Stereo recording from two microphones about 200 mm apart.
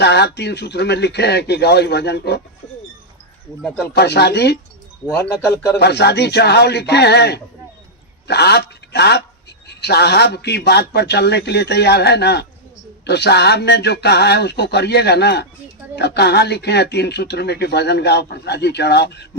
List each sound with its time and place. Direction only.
0.0 s speech: 55° left (ahead or behind)
3.9 s speech: 55° left (ahead or behind)
5.8 s speech: 55° left (ahead or behind)